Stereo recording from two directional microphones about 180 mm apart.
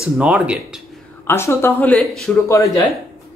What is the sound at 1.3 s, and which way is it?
Speech, 15° left (ahead or behind).